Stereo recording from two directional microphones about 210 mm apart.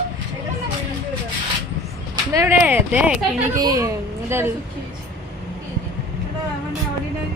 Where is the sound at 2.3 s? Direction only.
15° right (ahead or behind).